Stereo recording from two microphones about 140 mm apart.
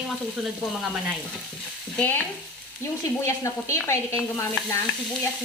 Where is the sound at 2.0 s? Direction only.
15° left (ahead or behind).